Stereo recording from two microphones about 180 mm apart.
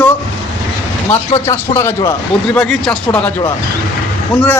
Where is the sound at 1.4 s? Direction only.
15° left (ahead or behind).